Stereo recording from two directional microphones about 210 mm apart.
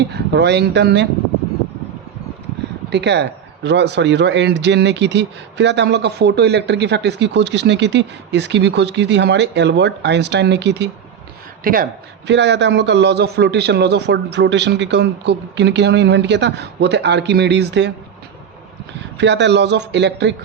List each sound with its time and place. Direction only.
0.0 s speech: 55° right (ahead or behind)
2.9 s a man's voice: 55° right (ahead or behind)
11.6 s speech: 40° right (ahead or behind)
12.3 s a man's voice: 55° right (ahead or behind)
19.1 s a man's voice: 55° right (ahead or behind)